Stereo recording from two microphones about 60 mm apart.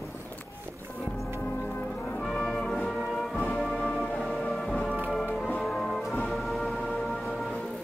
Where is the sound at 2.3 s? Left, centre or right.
Centre.